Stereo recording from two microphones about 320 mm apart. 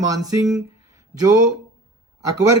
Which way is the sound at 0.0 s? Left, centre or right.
Centre.